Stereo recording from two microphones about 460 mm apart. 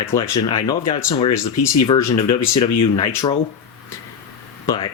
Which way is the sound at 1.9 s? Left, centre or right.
Centre.